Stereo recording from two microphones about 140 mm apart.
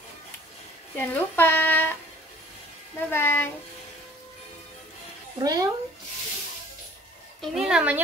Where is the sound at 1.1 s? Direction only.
15° left (ahead or behind).